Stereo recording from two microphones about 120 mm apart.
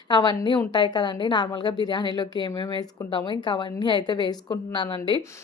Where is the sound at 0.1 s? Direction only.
35° left (ahead or behind).